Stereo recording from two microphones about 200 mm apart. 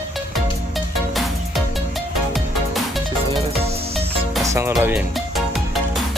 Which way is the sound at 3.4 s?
30° right (ahead or behind).